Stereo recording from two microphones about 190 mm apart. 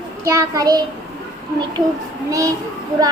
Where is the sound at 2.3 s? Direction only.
15° right (ahead or behind).